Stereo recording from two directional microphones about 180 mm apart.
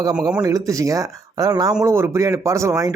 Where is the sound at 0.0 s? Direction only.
20° right (ahead or behind).